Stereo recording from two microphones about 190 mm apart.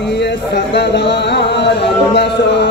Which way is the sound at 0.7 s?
65° left (ahead or behind).